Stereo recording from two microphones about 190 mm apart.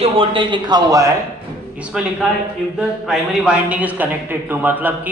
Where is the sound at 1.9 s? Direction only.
5° right (ahead or behind).